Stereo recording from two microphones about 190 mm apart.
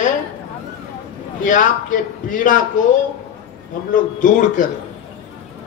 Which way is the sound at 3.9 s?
45° left (ahead or behind).